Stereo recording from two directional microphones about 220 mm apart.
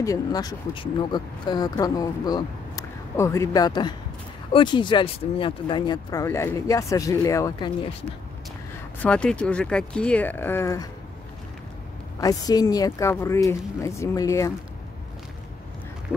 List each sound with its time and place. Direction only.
0.0 s speech: 15° left (ahead or behind)
9.0 s speech: 5° left (ahead or behind)
12.2 s speech: 15° left (ahead or behind)